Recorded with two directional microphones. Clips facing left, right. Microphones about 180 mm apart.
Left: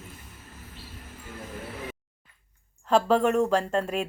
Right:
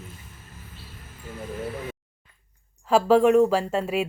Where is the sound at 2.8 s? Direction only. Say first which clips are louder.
Right 4 dB; 5° right (ahead or behind).